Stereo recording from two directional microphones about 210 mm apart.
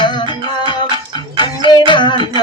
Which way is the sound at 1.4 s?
20° left (ahead or behind).